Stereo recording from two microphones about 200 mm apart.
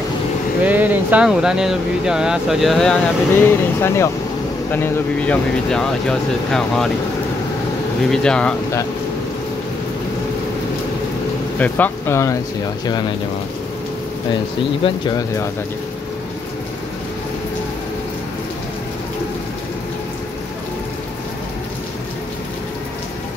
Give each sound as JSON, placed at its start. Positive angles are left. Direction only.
{"t": 0.7, "sound": "speech", "side_deg": -10}
{"t": 8.1, "sound": "speech", "side_deg": 5}
{"t": 11.5, "sound": "speech", "side_deg": 10}
{"t": 15.0, "sound": "speech", "side_deg": 15}